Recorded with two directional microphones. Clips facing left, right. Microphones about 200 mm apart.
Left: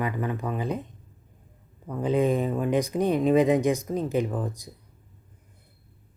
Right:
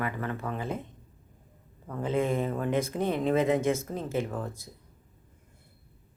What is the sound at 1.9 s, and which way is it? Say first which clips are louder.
Speech: left 5 dB; 15° left (ahead or behind).